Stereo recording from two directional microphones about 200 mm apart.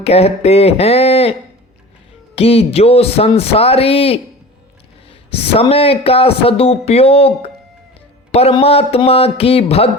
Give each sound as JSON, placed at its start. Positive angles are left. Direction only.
{"t": 0.0, "sound": "speech", "side_deg": 30}
{"t": 5.5, "sound": "speech", "side_deg": 30}